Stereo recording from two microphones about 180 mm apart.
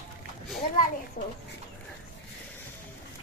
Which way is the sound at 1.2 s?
45° left (ahead or behind).